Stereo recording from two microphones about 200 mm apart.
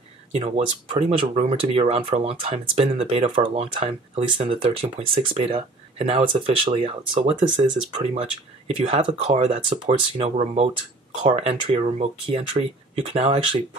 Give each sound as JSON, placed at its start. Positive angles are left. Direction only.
{"t": 0.3, "sound": "speech", "side_deg": -30}